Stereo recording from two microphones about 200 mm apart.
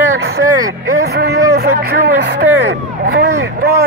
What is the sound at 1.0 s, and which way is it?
Speech, 55° right (ahead or behind).